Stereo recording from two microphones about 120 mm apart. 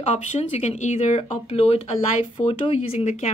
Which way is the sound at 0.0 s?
60° left (ahead or behind).